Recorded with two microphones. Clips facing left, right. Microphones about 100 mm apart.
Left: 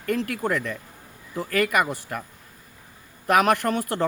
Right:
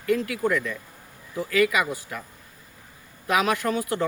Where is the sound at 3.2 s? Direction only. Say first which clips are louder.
Left 3 dB; 55° left (ahead or behind).